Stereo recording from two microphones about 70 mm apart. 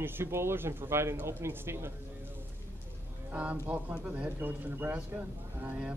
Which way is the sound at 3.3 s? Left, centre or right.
Centre.